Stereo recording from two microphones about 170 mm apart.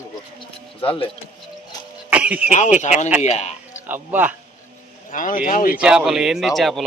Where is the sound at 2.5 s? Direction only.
45° left (ahead or behind).